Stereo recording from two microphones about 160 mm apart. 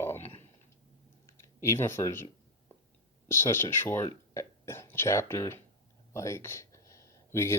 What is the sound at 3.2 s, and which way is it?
Speech, 15° left (ahead or behind).